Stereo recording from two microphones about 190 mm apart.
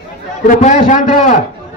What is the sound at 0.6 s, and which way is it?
Speech, 40° left (ahead or behind).